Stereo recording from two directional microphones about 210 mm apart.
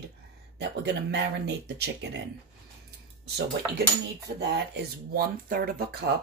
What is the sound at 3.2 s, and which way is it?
Speech, 50° right (ahead or behind).